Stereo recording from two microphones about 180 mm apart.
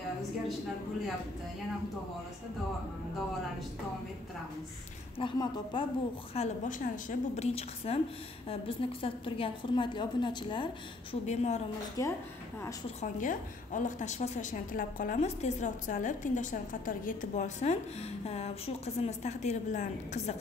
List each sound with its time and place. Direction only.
5.2 s a woman's voice: 25° left (ahead or behind)
6.3 s a woman's voice: 40° left (ahead or behind)
11.2 s a woman's voice: 40° left (ahead or behind)
13.0 s a woman's voice: 50° left (ahead or behind)